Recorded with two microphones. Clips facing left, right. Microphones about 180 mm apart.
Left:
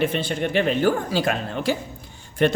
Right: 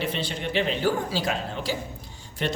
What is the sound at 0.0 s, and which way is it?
Speech, 50° left (ahead or behind).